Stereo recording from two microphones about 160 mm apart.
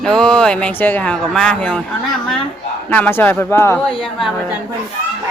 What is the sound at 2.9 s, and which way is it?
Speech, 10° left (ahead or behind).